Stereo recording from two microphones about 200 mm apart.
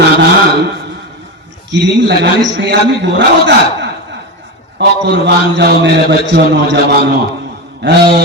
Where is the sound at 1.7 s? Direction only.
60° right (ahead or behind).